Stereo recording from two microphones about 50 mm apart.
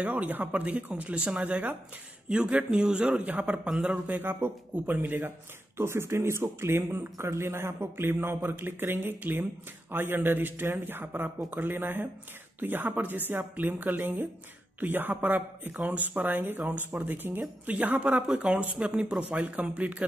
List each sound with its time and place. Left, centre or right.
0.0 s speech: right
2.2 s speech: centre
4.2 s a woman's voice: right
5.8 s a man's voice: right
18.4 s speech: right